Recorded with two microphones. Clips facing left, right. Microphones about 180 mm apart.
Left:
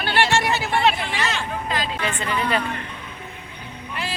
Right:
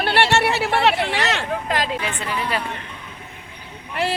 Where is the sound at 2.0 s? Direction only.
5° right (ahead or behind).